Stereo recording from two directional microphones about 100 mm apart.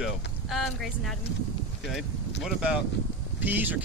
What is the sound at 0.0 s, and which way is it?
Speech, centre (ahead or behind).